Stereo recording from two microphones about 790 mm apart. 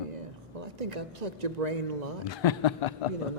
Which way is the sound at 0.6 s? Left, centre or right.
Right.